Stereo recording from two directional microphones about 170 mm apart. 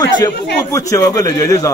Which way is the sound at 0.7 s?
20° left (ahead or behind).